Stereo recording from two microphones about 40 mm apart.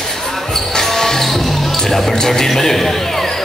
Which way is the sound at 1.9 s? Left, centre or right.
Centre.